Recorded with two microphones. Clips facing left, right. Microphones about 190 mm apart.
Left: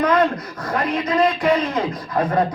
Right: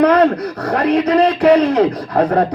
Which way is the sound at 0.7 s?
70° right (ahead or behind).